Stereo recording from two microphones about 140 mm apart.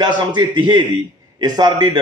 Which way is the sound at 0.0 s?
30° right (ahead or behind).